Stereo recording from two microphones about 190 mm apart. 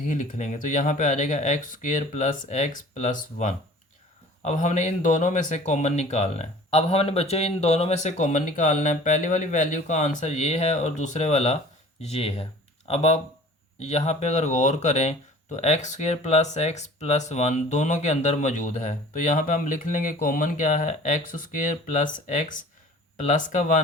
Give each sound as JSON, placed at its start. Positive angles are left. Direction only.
{"t": 0.0, "sound": "speech", "side_deg": 45}